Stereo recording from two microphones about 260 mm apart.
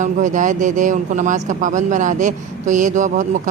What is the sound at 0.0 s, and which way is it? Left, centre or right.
Speech, right.